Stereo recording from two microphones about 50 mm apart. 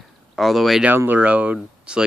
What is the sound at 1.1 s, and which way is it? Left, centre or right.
Speech, right.